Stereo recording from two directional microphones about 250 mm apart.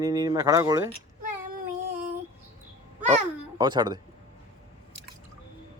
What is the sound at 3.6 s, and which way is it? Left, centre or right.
Speech, centre.